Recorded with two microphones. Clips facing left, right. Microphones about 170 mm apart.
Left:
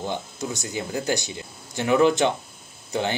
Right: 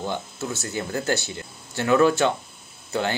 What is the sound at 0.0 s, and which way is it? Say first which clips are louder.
Speech: even; 15° left (ahead or behind).